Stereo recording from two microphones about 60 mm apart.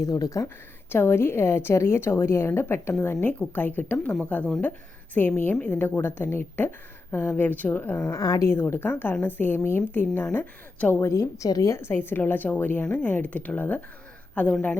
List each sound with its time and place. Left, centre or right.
0.0 s speech: left
0.9 s a woman's voice: left
8.1 s a woman's voice: left
8.4 s speech: left
10.3 s a woman's voice: left
11.0 s speech: left
11.8 s speech: left
12.8 s a woman's voice: left